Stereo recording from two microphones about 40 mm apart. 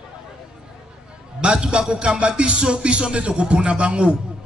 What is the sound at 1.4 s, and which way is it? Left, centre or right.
A man's voice, centre.